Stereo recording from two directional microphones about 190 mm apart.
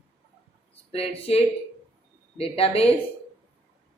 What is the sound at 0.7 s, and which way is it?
A woman's voice, 30° left (ahead or behind).